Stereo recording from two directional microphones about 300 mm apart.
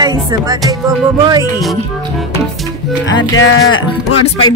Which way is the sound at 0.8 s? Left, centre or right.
Centre.